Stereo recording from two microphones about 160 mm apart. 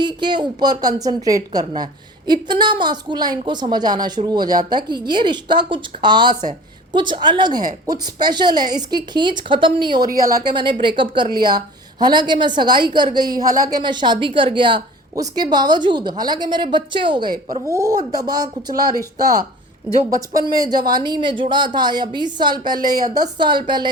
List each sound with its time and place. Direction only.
0.0 s a woman's voice: 30° right (ahead or behind)
17.5 s a woman's voice: 20° right (ahead or behind)